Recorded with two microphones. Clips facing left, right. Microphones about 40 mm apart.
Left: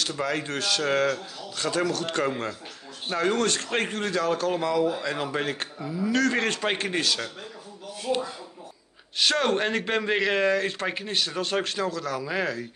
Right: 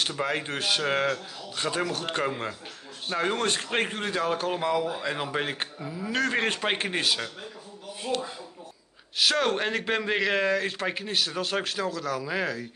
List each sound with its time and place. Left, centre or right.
0.1 s speech: right
9.2 s speech: centre